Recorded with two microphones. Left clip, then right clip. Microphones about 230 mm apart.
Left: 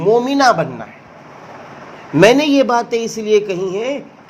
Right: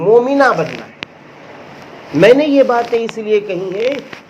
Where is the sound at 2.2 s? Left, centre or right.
Left.